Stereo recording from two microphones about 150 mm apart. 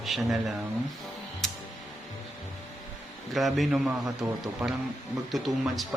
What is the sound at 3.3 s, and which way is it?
Speech, centre (ahead or behind).